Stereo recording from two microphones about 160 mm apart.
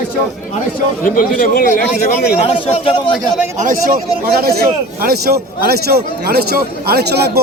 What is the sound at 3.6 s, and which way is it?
A man's voice, 60° right (ahead or behind).